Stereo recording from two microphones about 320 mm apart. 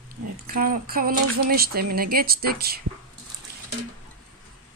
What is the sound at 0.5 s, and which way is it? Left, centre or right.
Speech, right.